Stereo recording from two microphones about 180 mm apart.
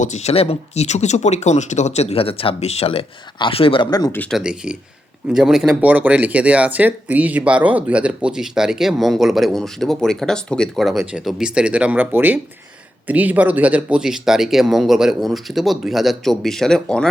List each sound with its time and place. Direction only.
0.0 s speech: 40° left (ahead or behind); by 4.2 s 20° left (ahead or behind)
4.2 s speech: centre (ahead or behind)